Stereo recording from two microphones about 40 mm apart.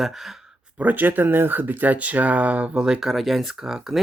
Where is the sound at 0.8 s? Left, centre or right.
Right.